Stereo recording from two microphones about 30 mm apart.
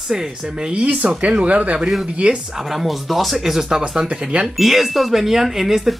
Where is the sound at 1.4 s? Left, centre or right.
Right.